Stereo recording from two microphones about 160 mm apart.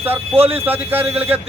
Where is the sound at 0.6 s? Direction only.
10° right (ahead or behind).